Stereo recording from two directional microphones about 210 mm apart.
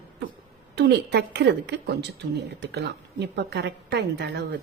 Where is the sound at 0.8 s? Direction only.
55° right (ahead or behind).